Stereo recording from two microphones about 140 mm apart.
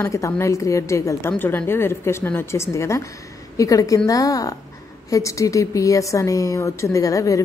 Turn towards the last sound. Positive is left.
turn(degrees=25)  # may be behind; listen again after turning